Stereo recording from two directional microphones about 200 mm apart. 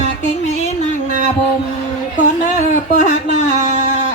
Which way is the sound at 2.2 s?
40° left (ahead or behind).